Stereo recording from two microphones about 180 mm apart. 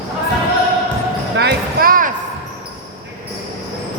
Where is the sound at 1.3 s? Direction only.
65° right (ahead or behind).